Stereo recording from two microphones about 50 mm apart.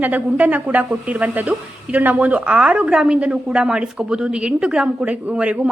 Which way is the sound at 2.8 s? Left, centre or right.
Centre.